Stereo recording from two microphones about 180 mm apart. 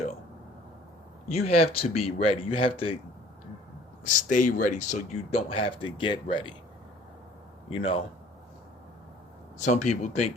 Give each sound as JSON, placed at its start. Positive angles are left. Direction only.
{"t": 1.3, "sound": "speech", "side_deg": 35}
{"t": 4.0, "sound": "speech", "side_deg": 45}
{"t": 7.7, "sound": "speech", "side_deg": 30}
{"t": 9.6, "sound": "speech", "side_deg": 40}